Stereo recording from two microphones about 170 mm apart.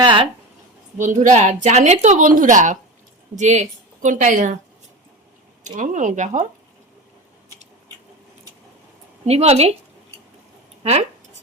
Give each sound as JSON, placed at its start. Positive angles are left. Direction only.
{"t": 0.0, "sound": "a sound", "side_deg": -30}
{"t": 0.9, "sound": "a woman's voice", "side_deg": -45}
{"t": 5.6, "sound": "a woman's voice", "side_deg": -45}
{"t": 9.2, "sound": "speech", "side_deg": -40}